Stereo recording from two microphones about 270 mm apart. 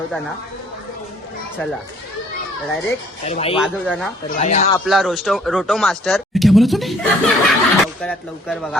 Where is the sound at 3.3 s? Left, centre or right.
Left.